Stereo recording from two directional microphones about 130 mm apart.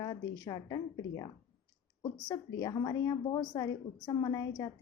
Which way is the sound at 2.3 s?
25° left (ahead or behind).